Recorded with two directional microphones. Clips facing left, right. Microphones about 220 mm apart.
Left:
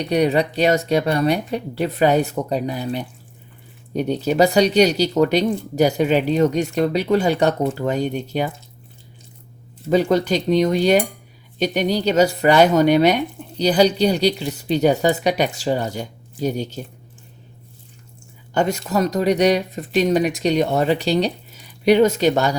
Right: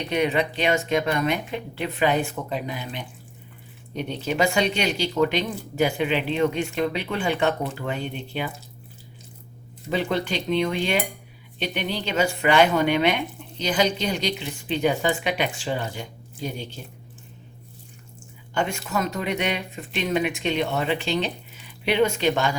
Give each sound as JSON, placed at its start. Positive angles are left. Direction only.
{"t": 0.1, "sound": "speech", "side_deg": 40}
{"t": 9.9, "sound": "speech", "side_deg": 40}
{"t": 18.5, "sound": "speech", "side_deg": 40}